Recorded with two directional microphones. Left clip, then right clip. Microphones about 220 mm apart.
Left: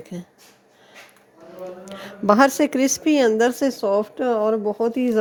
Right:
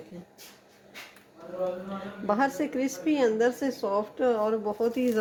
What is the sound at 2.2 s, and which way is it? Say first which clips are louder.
A woman's voice: left 11 dB; 50° left (ahead or behind).